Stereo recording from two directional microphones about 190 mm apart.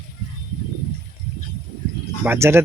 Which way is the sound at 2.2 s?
10° right (ahead or behind).